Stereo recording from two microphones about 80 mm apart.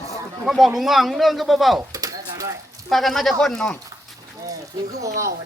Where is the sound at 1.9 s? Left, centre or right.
Right.